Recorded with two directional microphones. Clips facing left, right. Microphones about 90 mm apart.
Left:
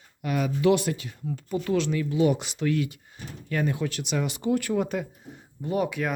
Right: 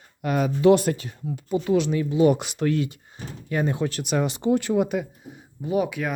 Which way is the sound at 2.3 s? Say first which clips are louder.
Right 4 dB; 55° right (ahead or behind).